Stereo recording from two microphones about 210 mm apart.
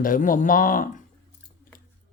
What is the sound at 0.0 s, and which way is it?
Speech, 40° left (ahead or behind).